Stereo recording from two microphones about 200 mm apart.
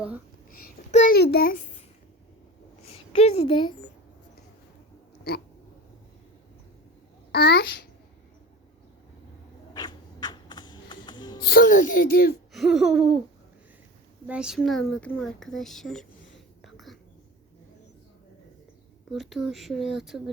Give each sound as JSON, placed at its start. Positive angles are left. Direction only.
{"t": 0.5, "sound": "a child's voice", "side_deg": 40}
{"t": 1.1, "sound": "a woman's voice", "side_deg": 50}
{"t": 3.1, "sound": "speech", "side_deg": 30}
{"t": 7.3, "sound": "a woman's voice", "side_deg": 50}
{"t": 9.7, "sound": "music", "side_deg": 20}
{"t": 11.4, "sound": "a woman's voice", "side_deg": 45}
{"t": 12.5, "sound": "a child's voice", "side_deg": 0}
{"t": 14.3, "sound": "a child's voice", "side_deg": -5}
{"t": 16.6, "sound": "whispering", "side_deg": 0}
{"t": 19.1, "sound": "a child's voice", "side_deg": 0}